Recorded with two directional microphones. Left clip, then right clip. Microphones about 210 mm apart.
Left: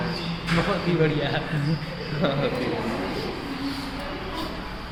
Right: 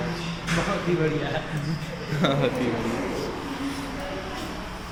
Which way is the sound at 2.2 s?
50° right (ahead or behind).